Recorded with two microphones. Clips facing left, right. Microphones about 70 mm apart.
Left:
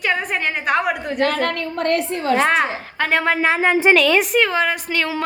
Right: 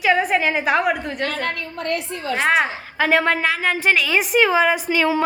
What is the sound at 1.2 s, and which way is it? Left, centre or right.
A woman's voice, left.